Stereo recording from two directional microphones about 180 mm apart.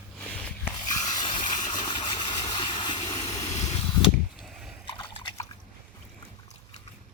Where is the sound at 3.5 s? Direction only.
40° left (ahead or behind).